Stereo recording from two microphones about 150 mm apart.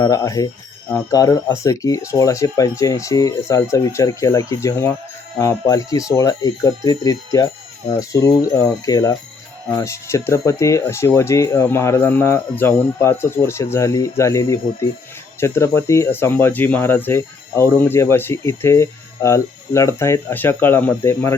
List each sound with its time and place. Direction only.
0.0 s speech: 25° left (ahead or behind)